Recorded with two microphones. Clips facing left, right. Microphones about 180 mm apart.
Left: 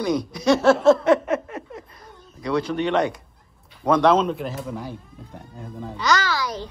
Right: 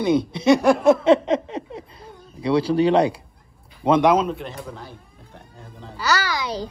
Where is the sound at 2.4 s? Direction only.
30° right (ahead or behind).